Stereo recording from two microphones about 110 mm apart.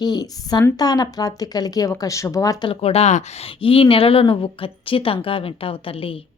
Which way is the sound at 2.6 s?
65° left (ahead or behind).